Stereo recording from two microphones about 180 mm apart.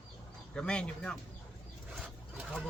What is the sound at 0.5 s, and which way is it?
Speech, 5° left (ahead or behind).